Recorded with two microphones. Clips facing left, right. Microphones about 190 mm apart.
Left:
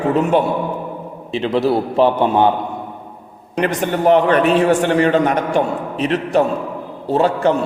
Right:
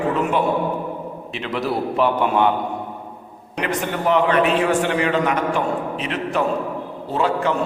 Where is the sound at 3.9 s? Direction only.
40° left (ahead or behind).